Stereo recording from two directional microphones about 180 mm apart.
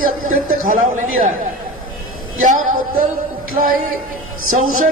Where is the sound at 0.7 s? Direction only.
45° right (ahead or behind).